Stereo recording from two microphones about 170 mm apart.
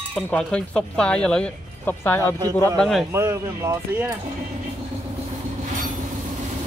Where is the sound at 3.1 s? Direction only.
15° right (ahead or behind).